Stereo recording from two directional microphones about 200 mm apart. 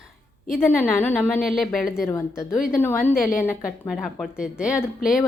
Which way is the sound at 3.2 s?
45° left (ahead or behind).